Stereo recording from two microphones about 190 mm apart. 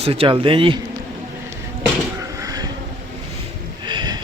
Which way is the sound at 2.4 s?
20° right (ahead or behind).